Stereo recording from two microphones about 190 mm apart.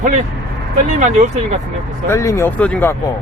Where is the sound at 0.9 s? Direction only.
40° right (ahead or behind).